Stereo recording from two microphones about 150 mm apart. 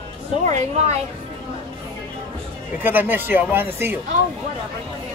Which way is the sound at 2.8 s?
10° right (ahead or behind).